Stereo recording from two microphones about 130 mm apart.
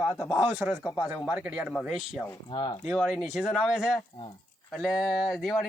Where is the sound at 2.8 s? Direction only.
Centre (ahead or behind).